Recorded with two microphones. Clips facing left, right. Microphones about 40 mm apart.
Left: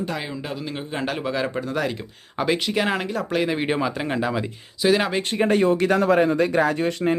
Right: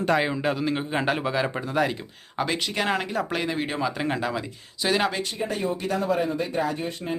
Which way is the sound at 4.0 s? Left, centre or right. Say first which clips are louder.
Left 3 dB; centre.